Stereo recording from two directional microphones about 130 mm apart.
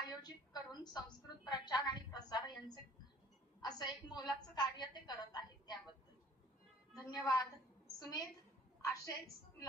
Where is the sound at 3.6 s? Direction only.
30° left (ahead or behind).